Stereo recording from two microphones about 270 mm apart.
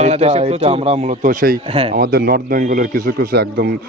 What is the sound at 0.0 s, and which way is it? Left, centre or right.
Speech, right.